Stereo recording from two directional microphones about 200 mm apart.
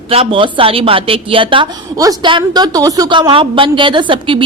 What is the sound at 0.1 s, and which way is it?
A woman's voice, 30° right (ahead or behind).